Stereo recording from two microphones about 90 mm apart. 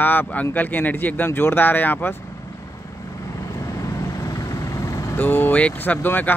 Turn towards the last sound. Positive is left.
turn(degrees=20)  # may be behind; listen again after turning